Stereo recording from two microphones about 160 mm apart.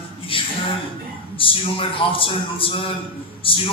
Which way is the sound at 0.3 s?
35° left (ahead or behind).